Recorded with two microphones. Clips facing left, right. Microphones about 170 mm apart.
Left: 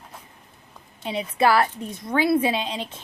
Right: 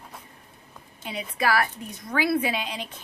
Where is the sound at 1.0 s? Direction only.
30° left (ahead or behind).